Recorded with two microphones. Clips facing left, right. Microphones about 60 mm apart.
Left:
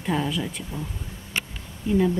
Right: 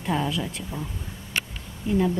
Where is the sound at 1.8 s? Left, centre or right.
Centre.